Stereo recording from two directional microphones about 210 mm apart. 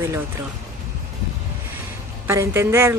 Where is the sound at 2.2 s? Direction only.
10° right (ahead or behind).